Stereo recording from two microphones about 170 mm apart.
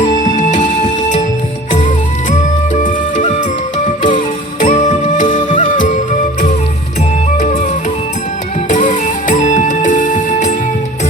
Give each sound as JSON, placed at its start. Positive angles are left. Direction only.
{"t": 0.3, "sound": "music", "side_deg": 45}
{"t": 2.7, "sound": "music", "side_deg": 45}
{"t": 4.6, "sound": "music", "side_deg": 45}
{"t": 8.7, "sound": "music", "side_deg": 45}